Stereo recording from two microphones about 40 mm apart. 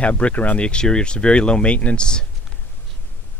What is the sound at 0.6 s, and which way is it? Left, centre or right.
Speech, left.